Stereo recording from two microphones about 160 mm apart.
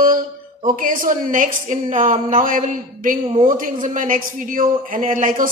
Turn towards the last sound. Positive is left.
turn(degrees=-55)  # may be behind; listen again after turning